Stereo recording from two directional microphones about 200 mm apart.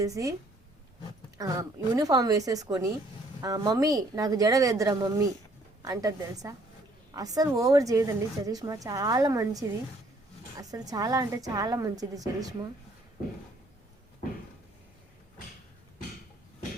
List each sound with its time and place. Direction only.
0.0 s a woman's voice: 15° right (ahead or behind)
1.4 s a woman's voice: 15° right (ahead or behind)